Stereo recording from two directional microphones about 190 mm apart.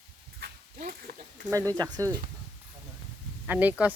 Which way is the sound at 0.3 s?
55° right (ahead or behind).